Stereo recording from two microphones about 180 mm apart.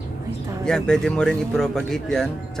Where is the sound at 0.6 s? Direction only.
5° left (ahead or behind).